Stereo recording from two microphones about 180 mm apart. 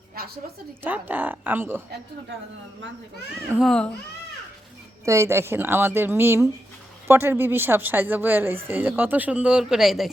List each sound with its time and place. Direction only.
0.2 s a sound: 55° right (ahead or behind)
0.8 s a woman's voice: 10° right (ahead or behind)
3.6 s speech: centre (ahead or behind)
5.0 s a woman's voice: 15° right (ahead or behind)